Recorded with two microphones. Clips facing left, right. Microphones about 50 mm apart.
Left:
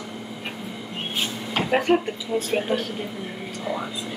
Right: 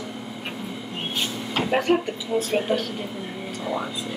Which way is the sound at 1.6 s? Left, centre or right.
Centre.